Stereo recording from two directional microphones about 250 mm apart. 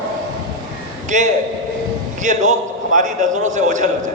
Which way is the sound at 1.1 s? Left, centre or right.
Right.